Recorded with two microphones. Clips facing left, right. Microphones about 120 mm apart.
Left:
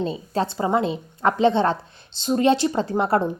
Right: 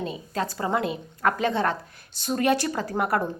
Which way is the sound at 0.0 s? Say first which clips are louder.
Left 5 dB; 30° left (ahead or behind).